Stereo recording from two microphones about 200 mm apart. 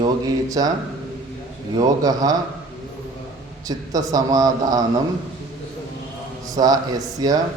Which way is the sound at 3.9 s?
20° right (ahead or behind).